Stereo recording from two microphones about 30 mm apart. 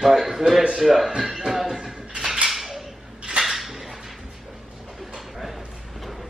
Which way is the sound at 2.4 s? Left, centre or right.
Centre.